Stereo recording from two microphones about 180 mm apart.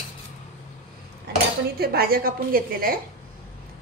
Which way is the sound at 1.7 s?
55° right (ahead or behind).